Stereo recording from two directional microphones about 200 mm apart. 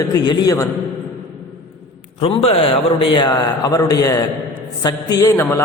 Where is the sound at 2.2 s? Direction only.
30° left (ahead or behind).